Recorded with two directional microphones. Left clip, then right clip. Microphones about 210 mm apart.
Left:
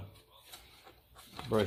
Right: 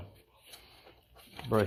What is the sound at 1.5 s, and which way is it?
Speech, 35° right (ahead or behind).